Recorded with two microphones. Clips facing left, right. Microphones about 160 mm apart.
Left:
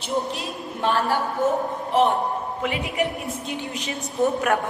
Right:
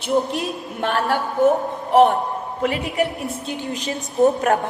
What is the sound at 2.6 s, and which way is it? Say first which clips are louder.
A woman's voice: right 5 dB; 40° right (ahead or behind).